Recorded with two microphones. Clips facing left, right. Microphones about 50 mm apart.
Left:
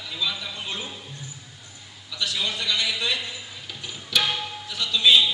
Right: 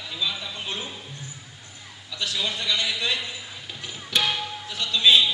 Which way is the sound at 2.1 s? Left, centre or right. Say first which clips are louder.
Left 1 dB; right.